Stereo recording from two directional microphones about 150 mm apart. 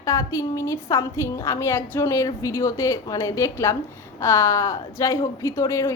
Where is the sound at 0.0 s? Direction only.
20° left (ahead or behind).